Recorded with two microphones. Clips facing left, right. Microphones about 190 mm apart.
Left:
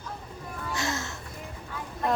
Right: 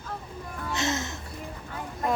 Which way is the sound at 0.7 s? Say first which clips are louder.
Right 3 dB; 20° right (ahead or behind).